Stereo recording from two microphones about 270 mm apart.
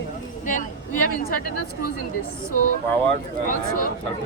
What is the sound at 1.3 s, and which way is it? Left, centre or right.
Speech, left.